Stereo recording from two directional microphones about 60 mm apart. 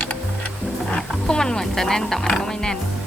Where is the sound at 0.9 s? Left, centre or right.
Centre.